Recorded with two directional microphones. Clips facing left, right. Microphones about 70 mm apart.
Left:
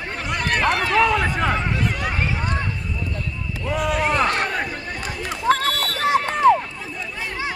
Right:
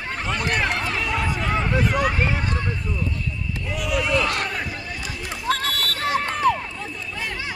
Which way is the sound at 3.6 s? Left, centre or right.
Left.